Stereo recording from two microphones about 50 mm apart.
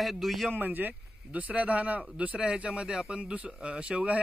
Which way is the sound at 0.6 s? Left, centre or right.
Right.